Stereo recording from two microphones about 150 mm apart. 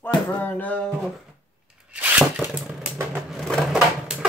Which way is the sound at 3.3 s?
Centre (ahead or behind).